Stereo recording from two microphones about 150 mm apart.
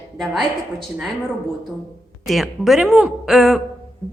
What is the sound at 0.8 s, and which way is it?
Speech, 5° right (ahead or behind).